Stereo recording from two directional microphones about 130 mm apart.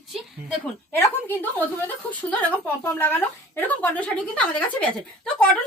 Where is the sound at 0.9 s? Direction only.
15° left (ahead or behind).